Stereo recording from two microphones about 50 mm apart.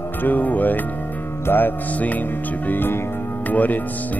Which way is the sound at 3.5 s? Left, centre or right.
Left.